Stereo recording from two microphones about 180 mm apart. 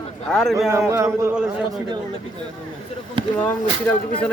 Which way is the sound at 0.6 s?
15° right (ahead or behind).